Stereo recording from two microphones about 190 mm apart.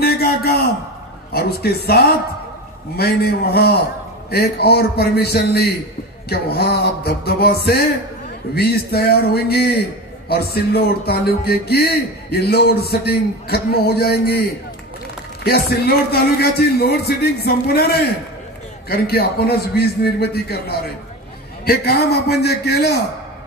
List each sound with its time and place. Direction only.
0.0 s a sound: 55° left (ahead or behind)
1.3 s speech: 55° left (ahead or behind)
3.0 s speech: 55° left (ahead or behind)
15.4 s speech: 55° left (ahead or behind)
18.9 s speech: 55° left (ahead or behind)